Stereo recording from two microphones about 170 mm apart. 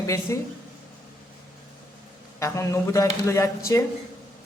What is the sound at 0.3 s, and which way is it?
Speech, 15° left (ahead or behind).